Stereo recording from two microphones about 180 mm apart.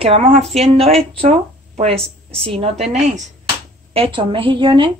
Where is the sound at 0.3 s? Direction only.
40° right (ahead or behind).